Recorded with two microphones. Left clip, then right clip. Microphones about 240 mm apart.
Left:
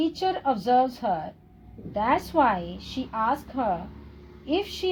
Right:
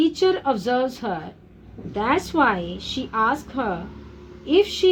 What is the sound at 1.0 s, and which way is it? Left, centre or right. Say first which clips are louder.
A woman's voice: left 1 dB; left.